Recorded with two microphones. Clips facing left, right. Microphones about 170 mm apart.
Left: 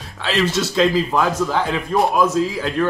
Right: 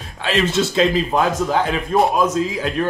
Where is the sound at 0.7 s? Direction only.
20° right (ahead or behind).